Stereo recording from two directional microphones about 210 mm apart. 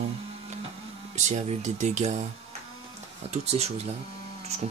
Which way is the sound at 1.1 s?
35° right (ahead or behind).